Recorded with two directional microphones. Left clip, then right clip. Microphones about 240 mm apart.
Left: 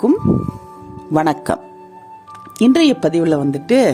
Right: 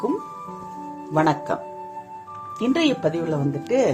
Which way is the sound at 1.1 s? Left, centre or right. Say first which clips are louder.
Left 4 dB; left.